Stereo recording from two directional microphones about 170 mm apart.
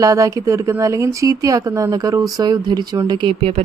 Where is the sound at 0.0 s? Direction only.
20° right (ahead or behind).